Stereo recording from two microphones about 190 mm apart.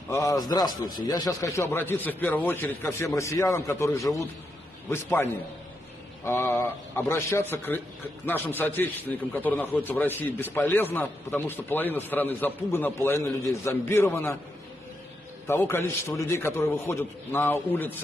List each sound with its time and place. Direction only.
0.1 s a man's voice: 15° left (ahead or behind)
15.4 s a man's voice: 10° left (ahead or behind)